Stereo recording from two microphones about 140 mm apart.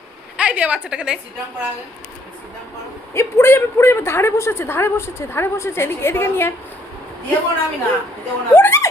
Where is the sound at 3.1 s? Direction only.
15° left (ahead or behind).